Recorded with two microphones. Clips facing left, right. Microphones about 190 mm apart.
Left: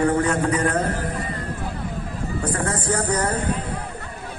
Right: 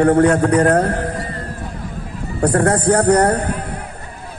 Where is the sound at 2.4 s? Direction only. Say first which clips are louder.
Right 11 dB; 65° right (ahead or behind).